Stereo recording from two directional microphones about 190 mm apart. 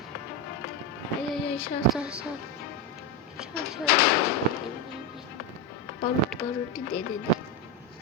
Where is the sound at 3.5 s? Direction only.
55° left (ahead or behind).